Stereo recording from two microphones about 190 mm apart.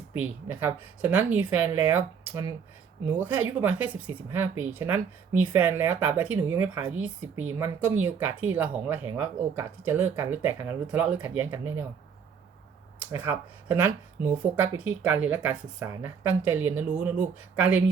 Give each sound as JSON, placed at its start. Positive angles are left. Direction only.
{"t": 0.4, "sound": "speech", "side_deg": -10}
{"t": 13.1, "sound": "speech", "side_deg": -10}
{"t": 15.8, "sound": "speech", "side_deg": -20}